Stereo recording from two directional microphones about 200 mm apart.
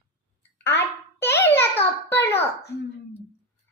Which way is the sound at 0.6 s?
10° left (ahead or behind).